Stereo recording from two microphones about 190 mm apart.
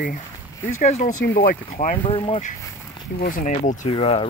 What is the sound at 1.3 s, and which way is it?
Speech, 60° left (ahead or behind).